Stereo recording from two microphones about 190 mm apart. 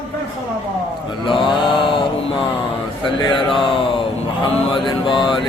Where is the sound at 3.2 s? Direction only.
25° left (ahead or behind).